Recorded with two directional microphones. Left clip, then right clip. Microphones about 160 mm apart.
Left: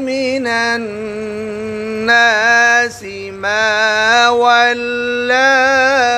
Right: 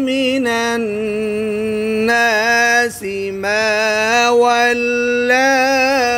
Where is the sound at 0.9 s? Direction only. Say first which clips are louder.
Right 3 dB; 35° right (ahead or behind).